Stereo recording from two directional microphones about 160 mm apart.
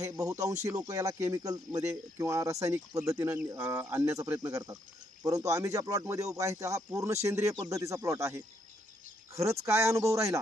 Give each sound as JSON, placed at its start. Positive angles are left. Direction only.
{"t": 0.0, "sound": "speech", "side_deg": -20}